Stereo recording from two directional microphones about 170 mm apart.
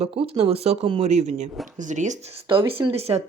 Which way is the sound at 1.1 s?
40° right (ahead or behind).